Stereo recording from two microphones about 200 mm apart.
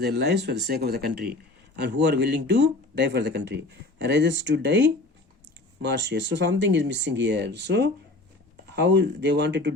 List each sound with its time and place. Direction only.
0.0 s speech: 55° right (ahead or behind)